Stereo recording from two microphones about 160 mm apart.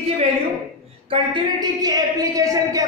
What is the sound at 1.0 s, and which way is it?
A man's voice, 30° right (ahead or behind).